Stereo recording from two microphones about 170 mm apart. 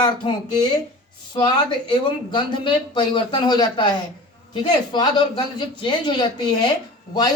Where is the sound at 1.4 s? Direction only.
25° left (ahead or behind).